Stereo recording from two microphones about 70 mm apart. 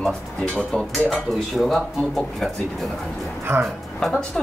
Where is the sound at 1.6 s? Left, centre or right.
Centre.